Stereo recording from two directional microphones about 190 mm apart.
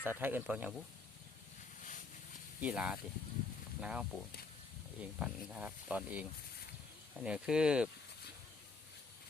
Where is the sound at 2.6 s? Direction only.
5° right (ahead or behind).